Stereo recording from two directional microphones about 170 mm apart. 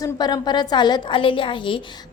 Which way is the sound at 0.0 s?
25° left (ahead or behind).